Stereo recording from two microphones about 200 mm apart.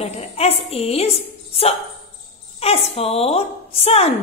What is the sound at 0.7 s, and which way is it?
A woman's voice, 30° left (ahead or behind).